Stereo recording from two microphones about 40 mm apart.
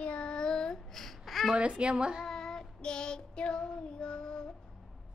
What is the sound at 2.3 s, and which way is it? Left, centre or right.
Child singing, centre.